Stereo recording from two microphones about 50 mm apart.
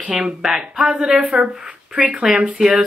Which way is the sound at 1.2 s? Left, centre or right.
Centre.